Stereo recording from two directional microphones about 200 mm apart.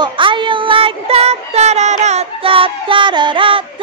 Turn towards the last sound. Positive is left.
turn(degrees=-25)  # may be behind; listen again after turning